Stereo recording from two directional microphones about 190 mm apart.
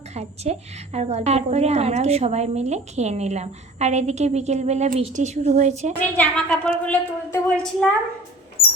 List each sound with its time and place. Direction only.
0.1 s a woman's voice: 35° right (ahead or behind)
6.0 s a woman's voice: 5° left (ahead or behind)